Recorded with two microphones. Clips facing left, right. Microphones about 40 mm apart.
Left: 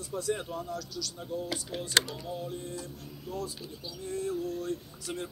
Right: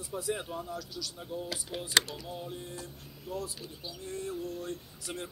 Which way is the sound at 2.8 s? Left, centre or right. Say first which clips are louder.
Left 3 dB; centre.